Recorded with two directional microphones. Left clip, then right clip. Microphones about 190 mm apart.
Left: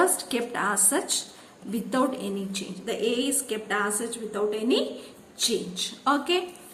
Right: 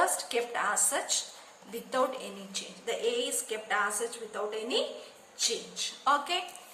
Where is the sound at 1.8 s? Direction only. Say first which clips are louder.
Left 3 dB; 20° left (ahead or behind).